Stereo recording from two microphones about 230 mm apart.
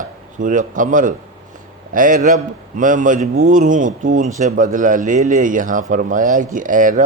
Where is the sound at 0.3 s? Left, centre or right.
Right.